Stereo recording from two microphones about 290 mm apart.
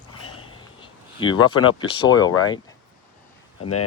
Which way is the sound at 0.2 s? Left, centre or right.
Left.